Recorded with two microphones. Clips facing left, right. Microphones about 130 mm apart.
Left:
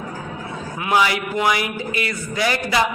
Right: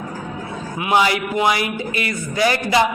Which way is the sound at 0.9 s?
25° right (ahead or behind).